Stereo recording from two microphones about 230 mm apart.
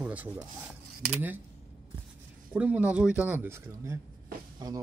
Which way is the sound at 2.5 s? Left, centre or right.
Centre.